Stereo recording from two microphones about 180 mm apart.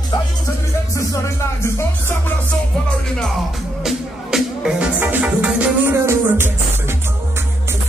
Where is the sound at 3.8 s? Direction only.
Centre (ahead or behind).